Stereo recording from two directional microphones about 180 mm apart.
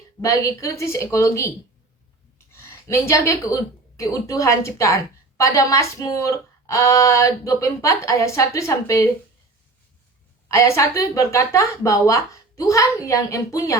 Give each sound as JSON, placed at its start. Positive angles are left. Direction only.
{"t": 0.2, "sound": "speech", "side_deg": 15}
{"t": 2.8, "sound": "speech", "side_deg": 15}
{"t": 10.5, "sound": "speech", "side_deg": 15}